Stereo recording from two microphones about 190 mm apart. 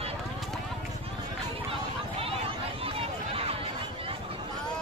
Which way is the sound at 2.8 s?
30° right (ahead or behind).